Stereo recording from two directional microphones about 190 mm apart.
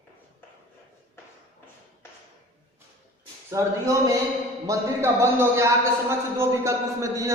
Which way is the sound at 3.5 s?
15° right (ahead or behind).